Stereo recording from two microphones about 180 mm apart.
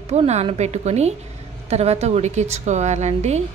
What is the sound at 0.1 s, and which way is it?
A woman's voice, 35° right (ahead or behind).